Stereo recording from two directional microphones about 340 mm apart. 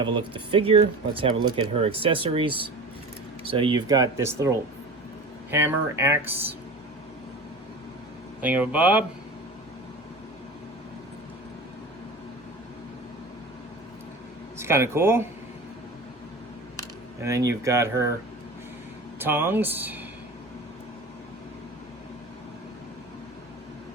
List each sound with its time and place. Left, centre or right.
0.0 s speech: centre
8.4 s speech: centre
14.6 s speech: centre
17.2 s speech: centre
19.2 s speech: centre